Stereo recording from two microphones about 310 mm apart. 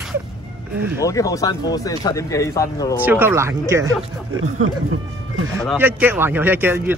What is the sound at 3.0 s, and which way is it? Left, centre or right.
Speech, centre.